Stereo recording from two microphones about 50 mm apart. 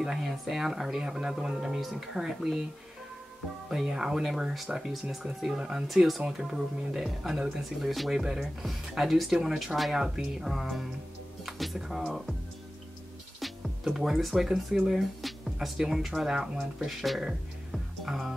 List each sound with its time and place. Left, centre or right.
0.0 s speech: centre
3.7 s speech: centre
5.9 s speech: centre
13.4 s music: centre
13.8 s speech: centre
18.0 s music: centre